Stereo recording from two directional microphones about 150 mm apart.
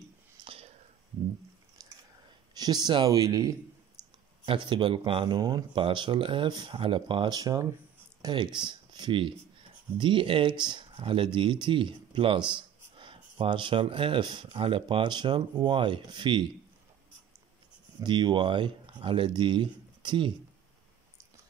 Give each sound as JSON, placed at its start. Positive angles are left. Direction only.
{"t": 2.6, "sound": "speech", "side_deg": -25}
{"t": 18.0, "sound": "speech", "side_deg": -30}